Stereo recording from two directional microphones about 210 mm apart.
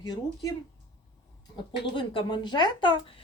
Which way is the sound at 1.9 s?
25° left (ahead or behind).